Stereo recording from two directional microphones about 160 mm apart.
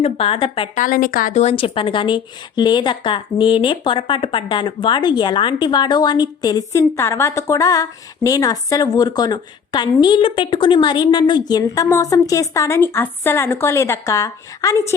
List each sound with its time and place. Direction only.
0.0 s a woman's voice: 35° left (ahead or behind)
0.8 s a woman's voice: 60° left (ahead or behind)
1.3 s speech: 45° left (ahead or behind); by 14.9 s 20° left (ahead or behind)